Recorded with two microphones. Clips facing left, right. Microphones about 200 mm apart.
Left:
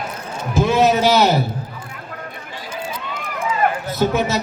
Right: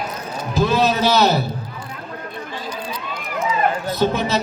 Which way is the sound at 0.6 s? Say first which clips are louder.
Left 2 dB; 20° left (ahead or behind).